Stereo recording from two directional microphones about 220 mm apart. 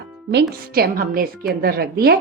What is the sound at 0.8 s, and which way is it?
Speech, 45° right (ahead or behind).